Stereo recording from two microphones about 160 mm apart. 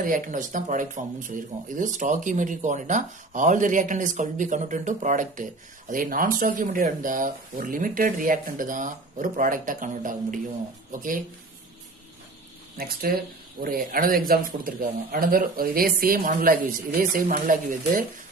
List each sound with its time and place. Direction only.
0.0 s speech: 55° right (ahead or behind)
12.7 s speech: 65° right (ahead or behind)